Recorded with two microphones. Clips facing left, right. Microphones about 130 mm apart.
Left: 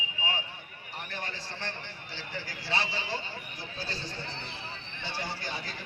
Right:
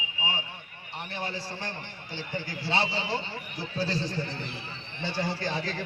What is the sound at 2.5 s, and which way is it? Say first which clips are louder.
Speech: right 4 dB; 25° right (ahead or behind).